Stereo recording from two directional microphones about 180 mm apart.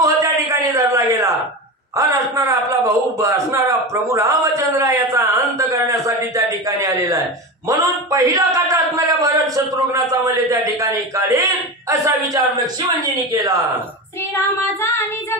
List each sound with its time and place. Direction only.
0.0 s a sound: 15° right (ahead or behind)
2.0 s a man's voice: 15° right (ahead or behind)
10.5 s a man's voice: 20° right (ahead or behind)
13.3 s a man's voice: 20° right (ahead or behind)
14.8 s child singing: 15° left (ahead or behind)